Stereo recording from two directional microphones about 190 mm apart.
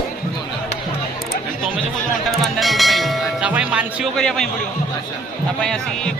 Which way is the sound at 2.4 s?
Centre (ahead or behind).